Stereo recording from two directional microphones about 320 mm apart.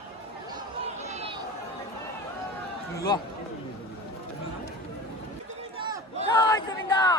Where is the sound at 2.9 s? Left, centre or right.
Centre.